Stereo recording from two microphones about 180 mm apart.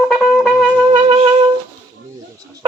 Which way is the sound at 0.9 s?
30° right (ahead or behind).